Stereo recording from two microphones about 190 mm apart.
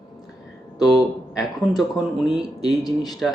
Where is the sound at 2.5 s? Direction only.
20° left (ahead or behind).